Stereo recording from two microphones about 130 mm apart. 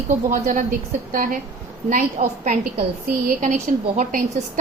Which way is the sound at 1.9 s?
70° right (ahead or behind).